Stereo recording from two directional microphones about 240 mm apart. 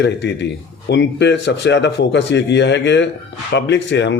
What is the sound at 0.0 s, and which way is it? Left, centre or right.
Speech, left.